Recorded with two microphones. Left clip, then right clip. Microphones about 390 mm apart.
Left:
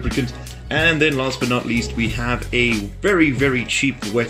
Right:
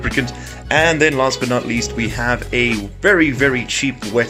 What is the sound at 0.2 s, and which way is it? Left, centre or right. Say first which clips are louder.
Speech: right 4 dB; centre.